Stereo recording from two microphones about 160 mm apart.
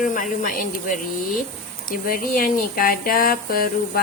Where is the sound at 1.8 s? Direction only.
60° left (ahead or behind).